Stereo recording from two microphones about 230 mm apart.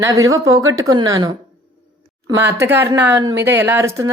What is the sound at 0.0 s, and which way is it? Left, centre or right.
A woman's voice, centre.